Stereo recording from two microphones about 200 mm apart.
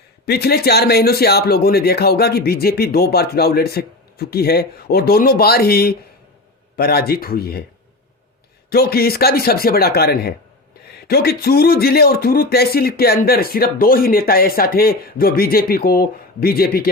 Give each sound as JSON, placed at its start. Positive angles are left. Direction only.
{"t": 0.3, "sound": "speech", "side_deg": 50}
{"t": 8.7, "sound": "speech", "side_deg": 50}